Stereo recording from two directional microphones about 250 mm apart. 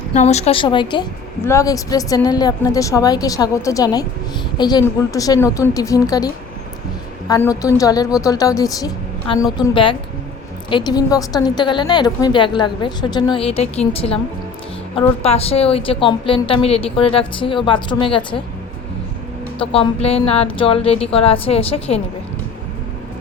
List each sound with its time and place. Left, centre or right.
0.1 s a woman's voice: left
15.2 s a woman's voice: left
19.5 s a woman's voice: left